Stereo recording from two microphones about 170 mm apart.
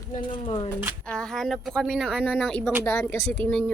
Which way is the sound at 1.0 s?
5° left (ahead or behind).